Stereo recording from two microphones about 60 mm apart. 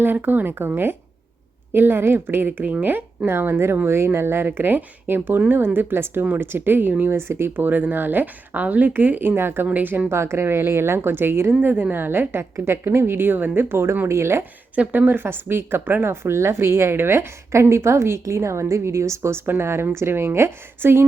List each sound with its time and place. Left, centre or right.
0.0 s a woman's voice: right
7.5 s a woman's voice: right
9.6 s a woman's voice: right
10.1 s a woman's voice: right
14.8 s speech: right